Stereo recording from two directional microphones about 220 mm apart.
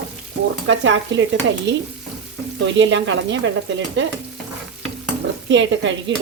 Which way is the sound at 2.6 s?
55° right (ahead or behind).